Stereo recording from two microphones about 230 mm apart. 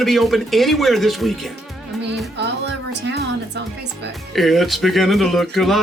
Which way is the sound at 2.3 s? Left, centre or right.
Right.